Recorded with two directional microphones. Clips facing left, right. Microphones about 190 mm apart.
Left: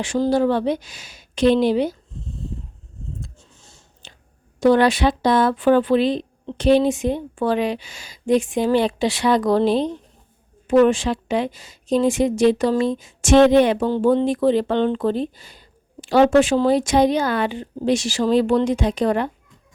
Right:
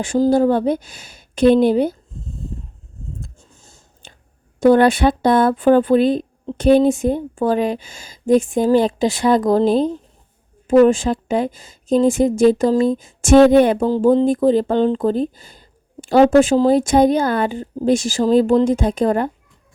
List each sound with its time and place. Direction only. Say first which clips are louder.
0.2 s speech: right 4 dB; 45° right (ahead or behind)
4.6 s speech: right 3 dB; 50° right (ahead or behind)